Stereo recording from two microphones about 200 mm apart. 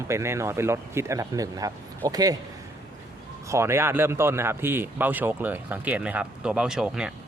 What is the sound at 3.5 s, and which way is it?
Speech, 15° right (ahead or behind).